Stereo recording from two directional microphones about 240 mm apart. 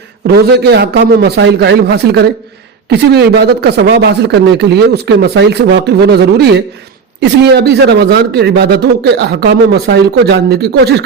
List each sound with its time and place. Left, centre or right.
0.3 s a man's voice: right